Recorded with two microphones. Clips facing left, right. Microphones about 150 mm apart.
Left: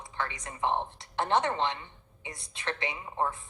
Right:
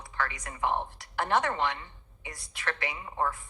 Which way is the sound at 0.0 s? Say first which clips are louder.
Right 1 dB; 20° left (ahead or behind).